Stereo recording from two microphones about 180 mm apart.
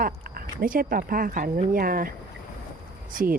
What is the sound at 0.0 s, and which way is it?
Speech, 55° right (ahead or behind).